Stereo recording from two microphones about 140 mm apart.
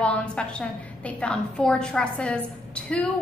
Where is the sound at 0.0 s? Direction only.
10° left (ahead or behind).